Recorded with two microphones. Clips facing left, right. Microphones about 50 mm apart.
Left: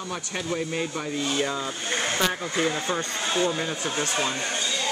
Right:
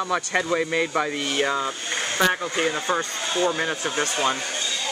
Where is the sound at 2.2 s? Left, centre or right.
Right.